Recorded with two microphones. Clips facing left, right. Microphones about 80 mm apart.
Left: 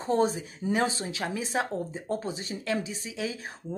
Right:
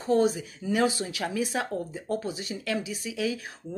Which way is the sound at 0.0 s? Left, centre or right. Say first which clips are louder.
Right 2 dB; left.